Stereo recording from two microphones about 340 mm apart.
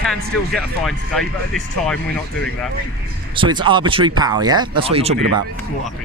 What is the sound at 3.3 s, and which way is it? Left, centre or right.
Speech, centre.